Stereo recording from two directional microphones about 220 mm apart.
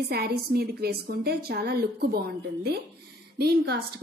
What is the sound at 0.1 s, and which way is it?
A woman's voice, 45° right (ahead or behind).